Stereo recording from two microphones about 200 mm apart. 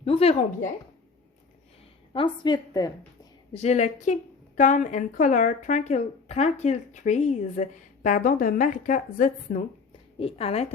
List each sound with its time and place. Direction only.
0.0 s a woman's voice: 30° left (ahead or behind)
2.1 s a woman's voice: 20° left (ahead or behind)
3.5 s a woman's voice: 35° left (ahead or behind)
10.2 s a woman's voice: 30° left (ahead or behind)